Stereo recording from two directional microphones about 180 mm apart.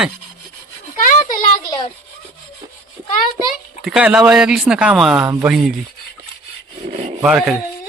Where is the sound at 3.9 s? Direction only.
5° right (ahead or behind).